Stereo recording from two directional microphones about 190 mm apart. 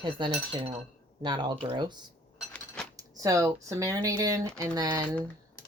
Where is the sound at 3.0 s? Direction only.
15° right (ahead or behind).